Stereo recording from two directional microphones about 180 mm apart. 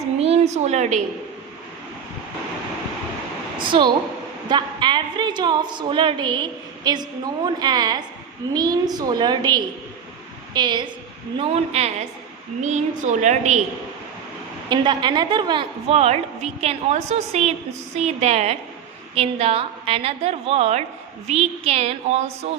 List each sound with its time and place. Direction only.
0.2 s a woman's voice: 35° right (ahead or behind)
3.6 s a woman's voice: 25° right (ahead or behind)
11.3 s a woman's voice: 35° right (ahead or behind)
14.7 s a woman's voice: 25° right (ahead or behind)